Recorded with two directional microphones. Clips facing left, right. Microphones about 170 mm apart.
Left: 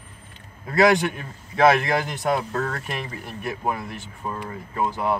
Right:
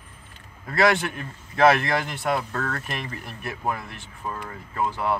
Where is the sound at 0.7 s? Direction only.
15° left (ahead or behind).